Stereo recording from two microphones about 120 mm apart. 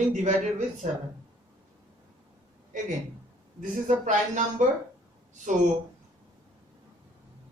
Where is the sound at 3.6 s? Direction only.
90° right.